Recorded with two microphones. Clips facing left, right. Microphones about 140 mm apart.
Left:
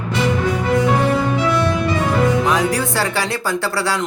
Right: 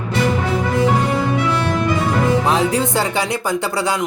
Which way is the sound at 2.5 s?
25° right (ahead or behind).